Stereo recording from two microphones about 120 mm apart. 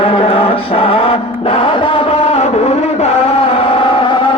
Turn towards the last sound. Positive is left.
turn(degrees=45)  # may be behind; listen again after turning